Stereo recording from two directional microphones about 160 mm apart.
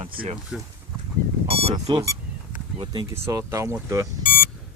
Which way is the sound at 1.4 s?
35° right (ahead or behind).